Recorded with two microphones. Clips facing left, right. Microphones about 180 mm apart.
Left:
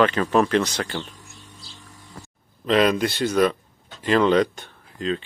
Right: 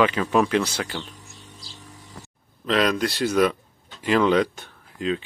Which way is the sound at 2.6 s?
Centre (ahead or behind).